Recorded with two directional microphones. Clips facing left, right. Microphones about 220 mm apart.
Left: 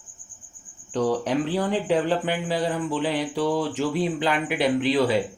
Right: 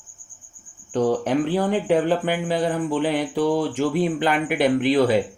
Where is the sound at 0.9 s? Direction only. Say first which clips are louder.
Right 3 dB; 50° right (ahead or behind).